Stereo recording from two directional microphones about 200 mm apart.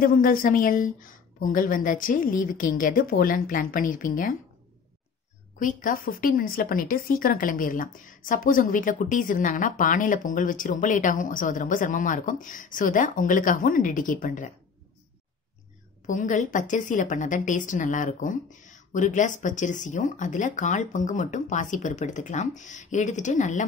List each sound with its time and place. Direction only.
0.0 s a woman's voice: 45° left (ahead or behind)
5.6 s speech: 40° left (ahead or behind)
16.1 s speech: 40° left (ahead or behind)